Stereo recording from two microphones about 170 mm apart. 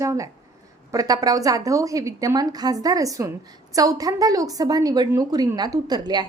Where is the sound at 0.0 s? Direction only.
20° right (ahead or behind).